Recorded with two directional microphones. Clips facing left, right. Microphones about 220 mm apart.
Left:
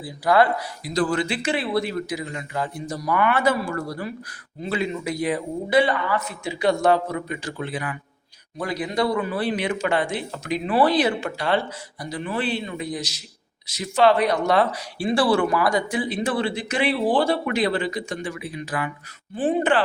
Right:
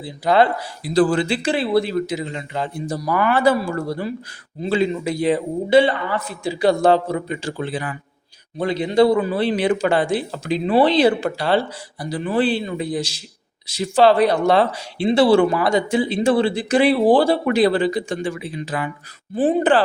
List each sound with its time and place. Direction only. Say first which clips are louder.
0.0 s speech: right 2 dB; 25° right (ahead or behind)